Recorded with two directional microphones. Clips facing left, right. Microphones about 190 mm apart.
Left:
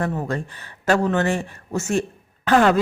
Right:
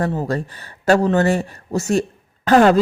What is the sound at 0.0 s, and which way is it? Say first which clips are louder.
Speech: right 3 dB; 30° right (ahead or behind).